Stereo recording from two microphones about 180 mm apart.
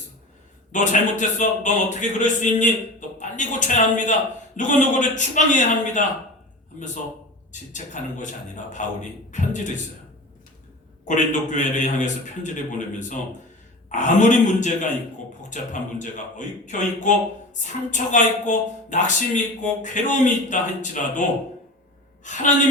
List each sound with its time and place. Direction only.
0.7 s a man's voice: 45° left (ahead or behind)
11.1 s speech: 45° left (ahead or behind)
13.9 s speech: 45° left (ahead or behind)